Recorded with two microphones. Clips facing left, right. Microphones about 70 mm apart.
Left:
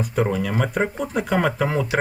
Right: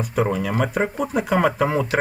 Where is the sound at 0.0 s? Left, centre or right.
Centre.